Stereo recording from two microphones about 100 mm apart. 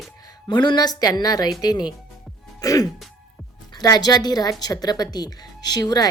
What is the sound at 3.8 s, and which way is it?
Speech, 40° left (ahead or behind).